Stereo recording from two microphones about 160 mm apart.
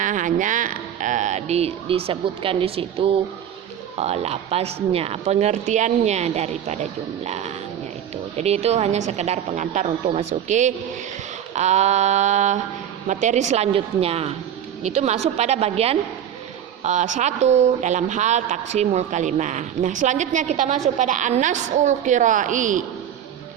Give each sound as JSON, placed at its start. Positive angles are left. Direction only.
{"t": 0.0, "sound": "speech", "side_deg": -50}